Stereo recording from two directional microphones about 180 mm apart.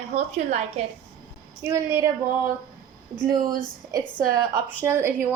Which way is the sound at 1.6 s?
15° right (ahead or behind).